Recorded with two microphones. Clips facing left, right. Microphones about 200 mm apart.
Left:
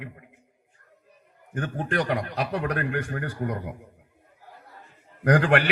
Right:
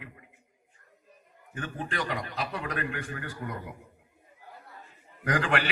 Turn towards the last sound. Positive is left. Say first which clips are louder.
# left 7 dB
turn(degrees=60)  # may be behind; listen again after turning